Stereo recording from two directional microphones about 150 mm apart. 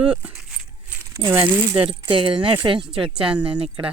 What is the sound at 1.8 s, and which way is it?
Speech, 35° right (ahead or behind).